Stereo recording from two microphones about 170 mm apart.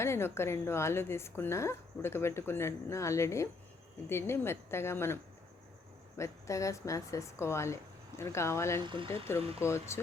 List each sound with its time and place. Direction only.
0.0 s speech: 15° left (ahead or behind)
8.8 s speech: 30° right (ahead or behind)
9.6 s speech: 15° left (ahead or behind)